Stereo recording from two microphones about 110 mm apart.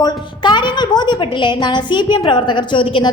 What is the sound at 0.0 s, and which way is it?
A woman's voice, 45° left (ahead or behind).